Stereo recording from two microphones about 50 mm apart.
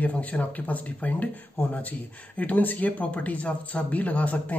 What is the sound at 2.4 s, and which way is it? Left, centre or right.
Speech, left.